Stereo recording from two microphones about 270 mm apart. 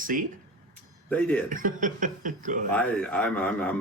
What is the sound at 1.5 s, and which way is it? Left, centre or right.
Speech, right.